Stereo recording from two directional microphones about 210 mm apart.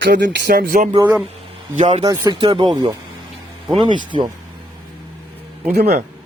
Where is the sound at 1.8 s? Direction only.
30° right (ahead or behind).